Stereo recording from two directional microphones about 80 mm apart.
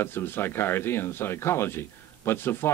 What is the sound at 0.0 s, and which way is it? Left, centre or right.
Speech, left.